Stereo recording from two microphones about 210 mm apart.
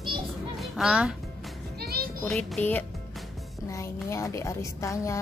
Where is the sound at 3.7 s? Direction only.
15° left (ahead or behind).